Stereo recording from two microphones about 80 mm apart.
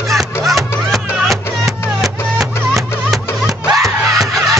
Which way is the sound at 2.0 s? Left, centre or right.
Centre.